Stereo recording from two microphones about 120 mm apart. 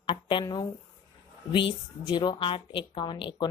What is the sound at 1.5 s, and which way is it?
A woman's voice, 40° left (ahead or behind).